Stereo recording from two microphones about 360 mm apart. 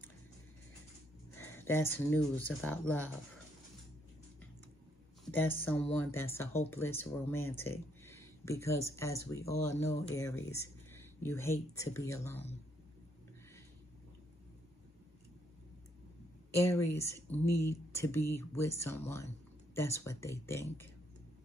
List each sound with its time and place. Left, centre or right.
1.4 s speech: centre
5.2 s speech: centre
16.5 s speech: centre